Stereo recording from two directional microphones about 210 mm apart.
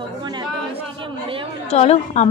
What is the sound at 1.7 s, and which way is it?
Speech, 30° left (ahead or behind).